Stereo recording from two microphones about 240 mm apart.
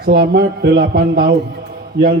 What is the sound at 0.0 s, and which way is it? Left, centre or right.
A man's voice, right.